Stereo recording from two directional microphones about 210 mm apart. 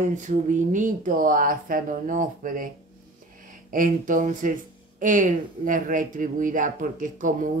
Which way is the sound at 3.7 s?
40° right (ahead or behind).